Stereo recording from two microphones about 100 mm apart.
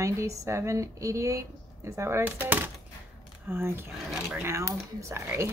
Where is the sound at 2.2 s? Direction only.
20° right (ahead or behind).